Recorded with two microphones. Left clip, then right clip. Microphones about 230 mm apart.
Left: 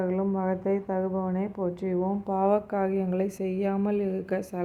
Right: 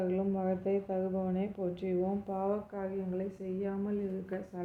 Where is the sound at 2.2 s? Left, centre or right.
Left.